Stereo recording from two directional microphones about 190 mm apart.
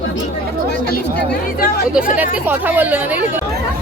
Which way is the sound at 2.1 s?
10° right (ahead or behind).